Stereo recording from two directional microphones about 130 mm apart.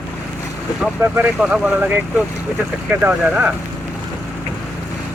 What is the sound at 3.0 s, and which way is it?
Speech, 10° right (ahead or behind).